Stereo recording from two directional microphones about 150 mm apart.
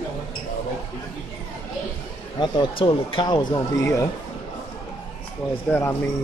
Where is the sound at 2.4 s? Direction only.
35° left (ahead or behind).